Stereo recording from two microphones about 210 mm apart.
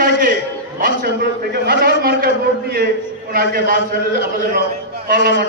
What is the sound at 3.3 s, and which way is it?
Speech, 45° right (ahead or behind).